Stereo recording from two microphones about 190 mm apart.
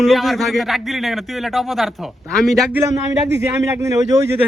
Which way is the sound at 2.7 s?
15° right (ahead or behind).